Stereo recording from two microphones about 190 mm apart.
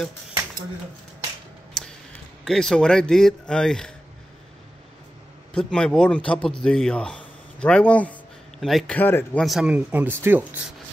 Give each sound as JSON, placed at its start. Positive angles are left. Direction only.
{"t": 1.8, "sound": "tick", "side_deg": 0}
{"t": 2.4, "sound": "speech", "side_deg": 0}
{"t": 5.5, "sound": "speech", "side_deg": 5}
{"t": 9.4, "sound": "speech", "side_deg": 0}